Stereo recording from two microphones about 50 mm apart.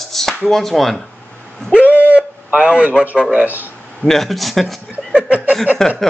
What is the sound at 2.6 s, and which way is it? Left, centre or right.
Speech, right.